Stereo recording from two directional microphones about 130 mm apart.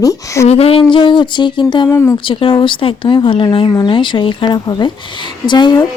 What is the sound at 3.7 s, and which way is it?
Speech, 30° left (ahead or behind).